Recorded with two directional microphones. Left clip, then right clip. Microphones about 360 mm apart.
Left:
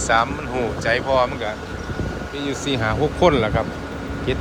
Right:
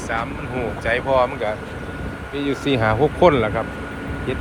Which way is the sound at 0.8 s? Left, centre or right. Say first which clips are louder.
Right 1 dB; centre.